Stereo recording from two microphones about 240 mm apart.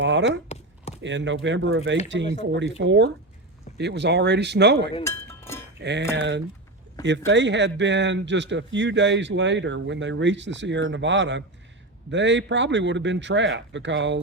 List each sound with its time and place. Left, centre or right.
0.0 s speech: right
0.4 s chopping: left
1.0 s speech: right
5.0 s chink: centre
5.8 s speech: right